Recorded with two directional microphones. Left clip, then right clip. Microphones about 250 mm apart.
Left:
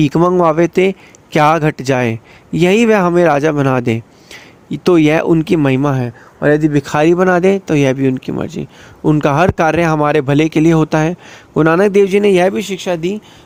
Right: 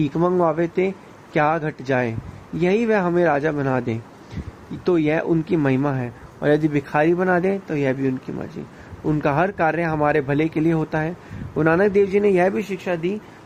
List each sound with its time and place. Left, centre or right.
0.0 s speech: left
6.4 s speech: left
6.8 s speech: left